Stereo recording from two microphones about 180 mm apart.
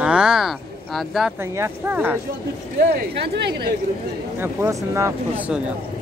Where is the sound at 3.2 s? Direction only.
65° right (ahead or behind).